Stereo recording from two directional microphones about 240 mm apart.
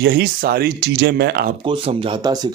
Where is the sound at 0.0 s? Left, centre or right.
Right.